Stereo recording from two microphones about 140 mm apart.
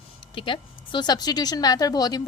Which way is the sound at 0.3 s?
35° left (ahead or behind).